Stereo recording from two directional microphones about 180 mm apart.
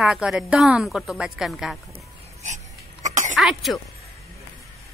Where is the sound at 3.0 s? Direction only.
45° right (ahead or behind).